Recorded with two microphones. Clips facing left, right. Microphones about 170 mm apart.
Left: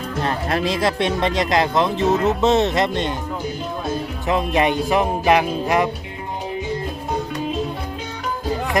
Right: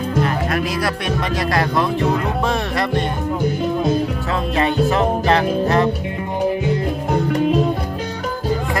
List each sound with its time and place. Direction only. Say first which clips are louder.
0.5 s speech: left 1 dB; 25° left (ahead or behind)
4.3 s music: left 4 dB; 15° left (ahead or behind)